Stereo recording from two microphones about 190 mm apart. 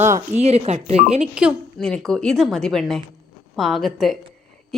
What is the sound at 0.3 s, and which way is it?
Speech, 35° right (ahead or behind).